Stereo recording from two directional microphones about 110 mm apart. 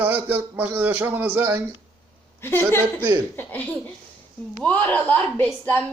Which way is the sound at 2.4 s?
20° left (ahead or behind).